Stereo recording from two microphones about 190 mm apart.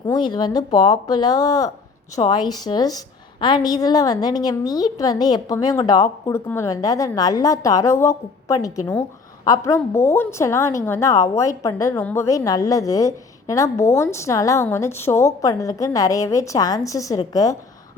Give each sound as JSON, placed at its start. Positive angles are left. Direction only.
{"t": 0.1, "sound": "a woman's voice", "side_deg": 20}